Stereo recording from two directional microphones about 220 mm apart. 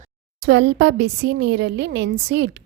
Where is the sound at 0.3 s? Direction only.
55° right (ahead or behind).